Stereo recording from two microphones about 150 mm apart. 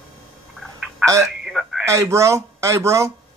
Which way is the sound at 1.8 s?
20° right (ahead or behind).